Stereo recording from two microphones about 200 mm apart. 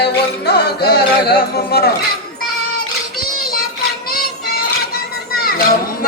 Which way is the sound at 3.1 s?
45° left (ahead or behind).